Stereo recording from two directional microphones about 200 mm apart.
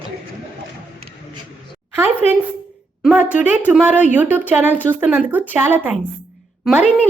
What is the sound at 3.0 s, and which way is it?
Speech, 5° right (ahead or behind).